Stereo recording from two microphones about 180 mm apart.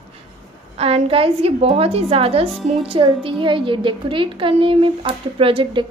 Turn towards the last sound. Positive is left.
turn(degrees=-25)  # may be behind; listen again after turning